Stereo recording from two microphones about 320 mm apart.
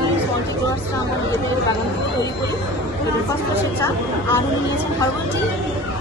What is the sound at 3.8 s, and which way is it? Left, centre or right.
Speech, centre.